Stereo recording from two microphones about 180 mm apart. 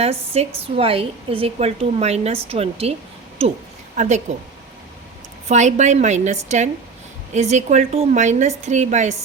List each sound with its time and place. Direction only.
0.0 s a woman's voice: 35° right (ahead or behind)
3.9 s a woman's voice: 40° right (ahead or behind)
5.5 s a woman's voice: 40° right (ahead or behind)